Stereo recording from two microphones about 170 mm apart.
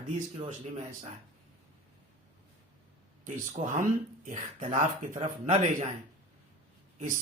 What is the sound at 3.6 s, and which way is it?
A man's voice, 45° right (ahead or behind).